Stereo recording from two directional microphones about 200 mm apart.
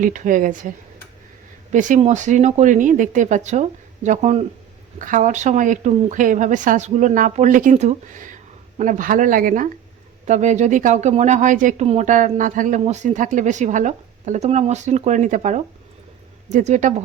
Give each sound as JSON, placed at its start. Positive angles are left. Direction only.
{"t": 0.0, "sound": "a woman's voice", "side_deg": -40}
{"t": 1.7, "sound": "a woman's voice", "side_deg": -40}